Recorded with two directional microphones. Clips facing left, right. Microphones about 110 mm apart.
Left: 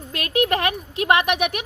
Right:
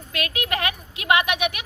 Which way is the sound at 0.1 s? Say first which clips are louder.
Left 6 dB; 40° left (ahead or behind).